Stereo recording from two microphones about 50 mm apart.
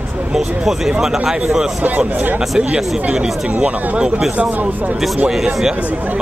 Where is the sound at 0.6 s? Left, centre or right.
Centre.